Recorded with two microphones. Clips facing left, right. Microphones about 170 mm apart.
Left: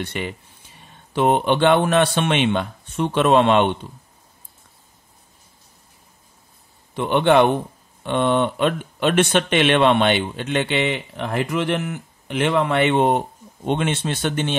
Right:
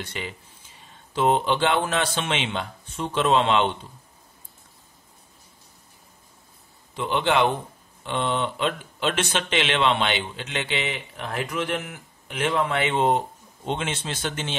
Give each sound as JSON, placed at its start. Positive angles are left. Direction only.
{"t": 0.0, "sound": "speech", "side_deg": 60}
{"t": 6.9, "sound": "speech", "side_deg": 60}